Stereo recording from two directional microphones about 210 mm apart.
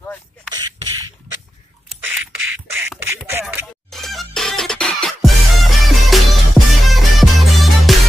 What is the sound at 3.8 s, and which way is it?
Music, centre (ahead or behind).